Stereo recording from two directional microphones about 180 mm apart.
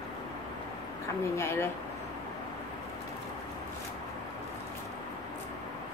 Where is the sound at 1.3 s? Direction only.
15° left (ahead or behind).